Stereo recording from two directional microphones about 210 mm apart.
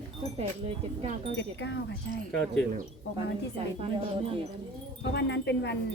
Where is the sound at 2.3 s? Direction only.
5° left (ahead or behind).